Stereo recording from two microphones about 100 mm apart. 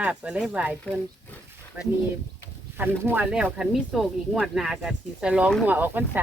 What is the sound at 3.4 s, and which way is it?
Speech, 5° right (ahead or behind).